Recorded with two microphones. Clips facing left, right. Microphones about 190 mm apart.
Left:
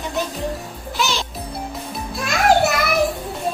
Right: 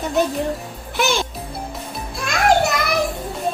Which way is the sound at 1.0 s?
55° right (ahead or behind).